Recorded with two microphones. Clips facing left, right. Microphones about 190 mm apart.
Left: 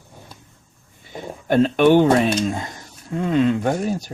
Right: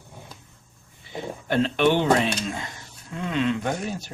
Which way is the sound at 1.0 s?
45° left (ahead or behind).